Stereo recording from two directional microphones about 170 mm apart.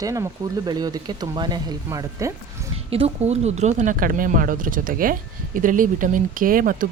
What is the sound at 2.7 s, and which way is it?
Speech, 35° right (ahead or behind).